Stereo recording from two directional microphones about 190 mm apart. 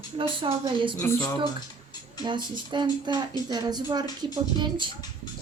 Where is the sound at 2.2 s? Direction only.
25° right (ahead or behind).